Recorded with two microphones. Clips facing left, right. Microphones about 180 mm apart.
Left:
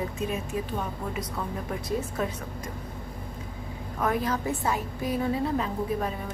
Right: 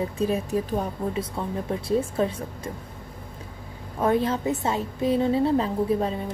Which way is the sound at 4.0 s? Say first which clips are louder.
Right 5 dB; 25° right (ahead or behind).